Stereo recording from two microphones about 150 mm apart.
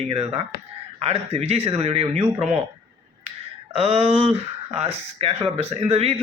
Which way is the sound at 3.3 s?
40° right (ahead or behind).